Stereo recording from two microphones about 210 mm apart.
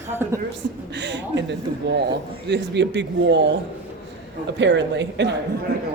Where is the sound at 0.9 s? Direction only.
55° right (ahead or behind).